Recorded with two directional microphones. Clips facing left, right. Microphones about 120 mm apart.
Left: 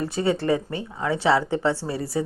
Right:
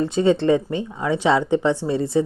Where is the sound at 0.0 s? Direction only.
20° right (ahead or behind).